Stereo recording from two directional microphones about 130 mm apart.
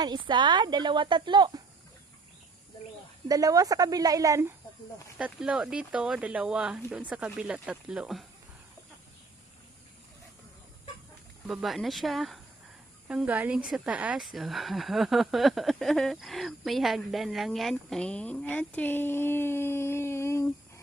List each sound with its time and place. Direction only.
0.0 s a woman's voice: 35° right (ahead or behind)
3.2 s speech: 30° right (ahead or behind)
5.1 s speech: 5° right (ahead or behind)
11.4 s speech: centre (ahead or behind); by 20.8 s 20° left (ahead or behind)